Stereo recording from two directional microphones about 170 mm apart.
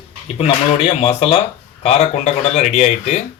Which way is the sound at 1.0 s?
35° left (ahead or behind).